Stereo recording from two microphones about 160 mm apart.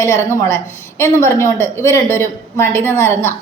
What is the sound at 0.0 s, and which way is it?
A woman's voice, 20° left (ahead or behind).